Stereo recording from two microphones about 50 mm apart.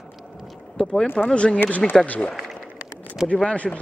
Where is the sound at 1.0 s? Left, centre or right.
Left.